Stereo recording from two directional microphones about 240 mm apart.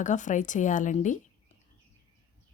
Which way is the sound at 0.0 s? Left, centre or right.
Left.